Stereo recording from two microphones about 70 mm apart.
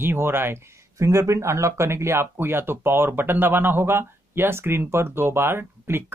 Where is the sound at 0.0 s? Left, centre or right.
Right.